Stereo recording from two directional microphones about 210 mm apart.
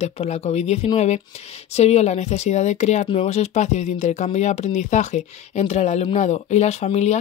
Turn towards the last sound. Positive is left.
turn(degrees=30)  # may be behind; listen again after turning